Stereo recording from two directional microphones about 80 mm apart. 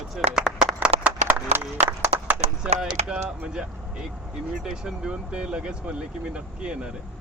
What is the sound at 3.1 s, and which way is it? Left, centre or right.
Speech, centre.